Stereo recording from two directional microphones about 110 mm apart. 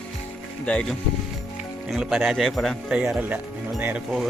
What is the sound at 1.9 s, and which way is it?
Speech, 5° right (ahead or behind).